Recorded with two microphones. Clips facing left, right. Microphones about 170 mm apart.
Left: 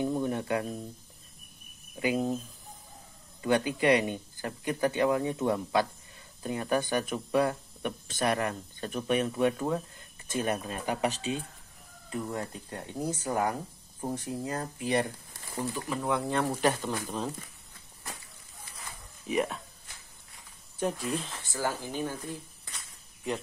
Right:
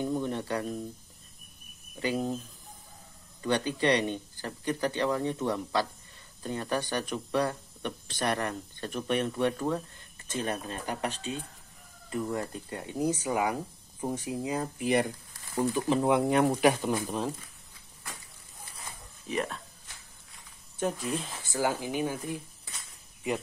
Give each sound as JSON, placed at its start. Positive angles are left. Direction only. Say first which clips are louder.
{"t": 0.0, "sound": "a sound", "louder": "left 1 dB", "side_deg": 10}
{"t": 2.1, "sound": "speech", "louder": "left 1 dB", "side_deg": 5}
{"t": 3.4, "sound": "speech", "louder": "left 2 dB", "side_deg": 10}
{"t": 19.2, "sound": "speech", "louder": "left 3 dB", "side_deg": 5}
{"t": 20.7, "sound": "speech", "louder": "even", "side_deg": 0}